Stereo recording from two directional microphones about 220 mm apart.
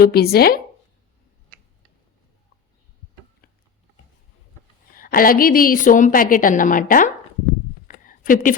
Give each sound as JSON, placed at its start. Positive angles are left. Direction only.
{"t": 0.0, "sound": "speech", "side_deg": 45}
{"t": 4.9, "sound": "a woman's voice", "side_deg": 40}
{"t": 7.9, "sound": "a sound", "side_deg": 40}